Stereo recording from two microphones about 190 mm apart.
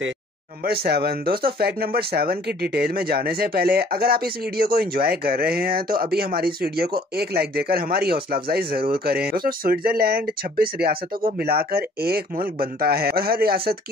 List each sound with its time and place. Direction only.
0.7 s speech: 55° right (ahead or behind)